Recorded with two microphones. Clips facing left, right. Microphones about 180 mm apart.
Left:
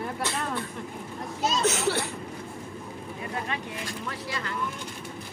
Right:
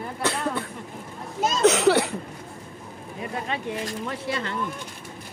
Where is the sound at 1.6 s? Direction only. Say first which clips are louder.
Right 11 dB; 70° right (ahead or behind).